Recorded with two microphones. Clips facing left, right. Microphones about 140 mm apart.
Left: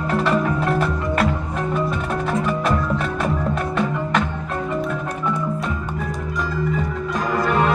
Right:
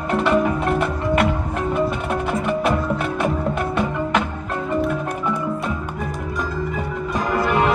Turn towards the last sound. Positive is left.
turn(degrees=-5)  # may be behind; listen again after turning